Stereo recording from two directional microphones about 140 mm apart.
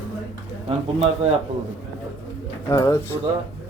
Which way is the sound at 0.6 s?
45° right (ahead or behind).